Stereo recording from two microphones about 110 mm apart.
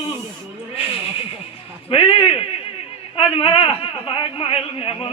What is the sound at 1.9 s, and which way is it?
A man's voice, 55° left (ahead or behind).